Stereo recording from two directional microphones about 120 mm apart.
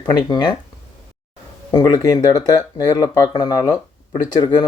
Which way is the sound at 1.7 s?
35° left (ahead or behind).